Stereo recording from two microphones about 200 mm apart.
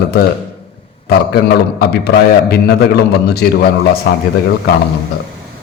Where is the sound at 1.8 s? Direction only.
50° left (ahead or behind).